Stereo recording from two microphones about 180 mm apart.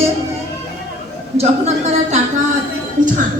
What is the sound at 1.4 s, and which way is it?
Speech, 35° right (ahead or behind).